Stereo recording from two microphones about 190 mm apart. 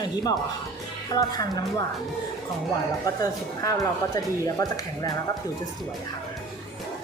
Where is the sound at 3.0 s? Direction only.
20° left (ahead or behind).